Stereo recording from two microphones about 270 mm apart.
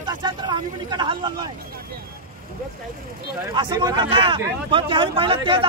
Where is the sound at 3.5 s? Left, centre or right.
Centre.